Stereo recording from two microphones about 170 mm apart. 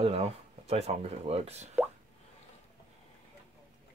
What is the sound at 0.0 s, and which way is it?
Speech, 35° right (ahead or behind).